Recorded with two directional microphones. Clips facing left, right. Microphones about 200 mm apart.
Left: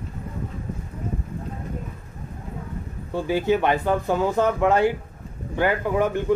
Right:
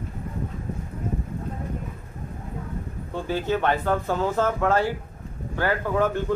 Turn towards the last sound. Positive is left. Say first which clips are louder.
# left 1 dB
turn(degrees=15)  # may be behind; listen again after turning